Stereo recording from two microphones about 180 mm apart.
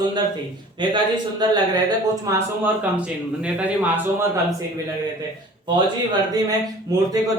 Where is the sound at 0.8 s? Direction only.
25° right (ahead or behind).